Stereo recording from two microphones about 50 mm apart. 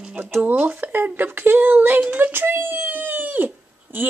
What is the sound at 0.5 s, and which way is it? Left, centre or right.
Speech, right.